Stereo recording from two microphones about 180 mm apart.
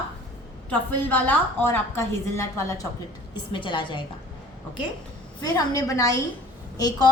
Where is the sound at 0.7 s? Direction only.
10° left (ahead or behind).